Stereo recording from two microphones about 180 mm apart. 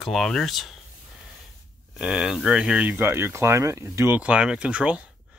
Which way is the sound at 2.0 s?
5° right (ahead or behind).